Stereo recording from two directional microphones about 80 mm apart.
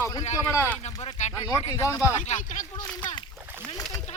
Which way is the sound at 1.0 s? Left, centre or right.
Left.